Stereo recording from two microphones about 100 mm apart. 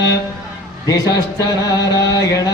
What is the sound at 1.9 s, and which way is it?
Mantra, 35° left (ahead or behind).